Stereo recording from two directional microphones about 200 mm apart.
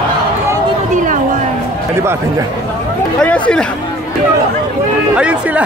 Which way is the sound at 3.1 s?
5° left (ahead or behind).